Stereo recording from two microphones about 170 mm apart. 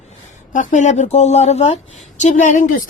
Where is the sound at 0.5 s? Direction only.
50° left (ahead or behind).